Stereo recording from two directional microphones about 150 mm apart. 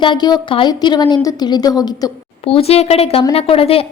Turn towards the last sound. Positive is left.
turn(degrees=40)  # may be behind; listen again after turning